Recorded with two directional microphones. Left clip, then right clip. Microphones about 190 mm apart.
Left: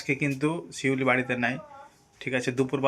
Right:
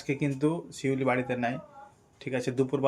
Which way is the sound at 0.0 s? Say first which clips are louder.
Left 2 dB; 5° right (ahead or behind).